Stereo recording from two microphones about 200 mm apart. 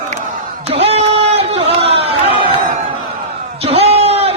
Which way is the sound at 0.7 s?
30° right (ahead or behind).